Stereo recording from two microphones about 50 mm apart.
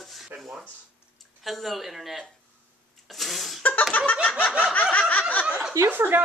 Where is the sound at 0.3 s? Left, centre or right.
Right.